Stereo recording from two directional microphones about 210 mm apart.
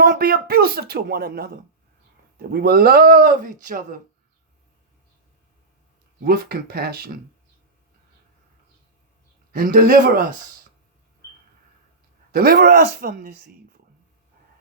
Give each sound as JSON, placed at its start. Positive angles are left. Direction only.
{"t": 0.0, "sound": "speech", "side_deg": -45}
{"t": 6.2, "sound": "speech", "side_deg": -50}
{"t": 9.5, "sound": "speech", "side_deg": -45}
{"t": 12.3, "sound": "speech", "side_deg": -45}